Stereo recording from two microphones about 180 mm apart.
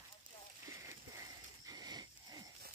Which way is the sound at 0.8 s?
20° right (ahead or behind).